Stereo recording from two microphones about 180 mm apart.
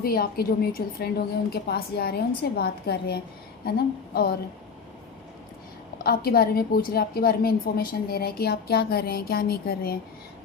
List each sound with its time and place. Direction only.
0.0 s a woman's voice: 55° left (ahead or behind)
6.0 s a woman's voice: 55° left (ahead or behind)